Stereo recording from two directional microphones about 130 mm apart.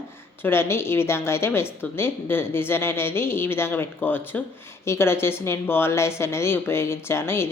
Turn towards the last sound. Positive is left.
turn(degrees=20)  # may be behind; listen again after turning